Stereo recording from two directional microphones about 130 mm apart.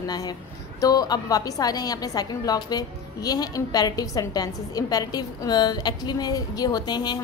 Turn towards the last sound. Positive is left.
turn(degrees=35)  # may be behind; listen again after turning